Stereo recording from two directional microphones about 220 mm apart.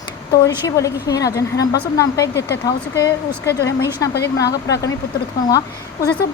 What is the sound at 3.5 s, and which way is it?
Speech, 50° left (ahead or behind).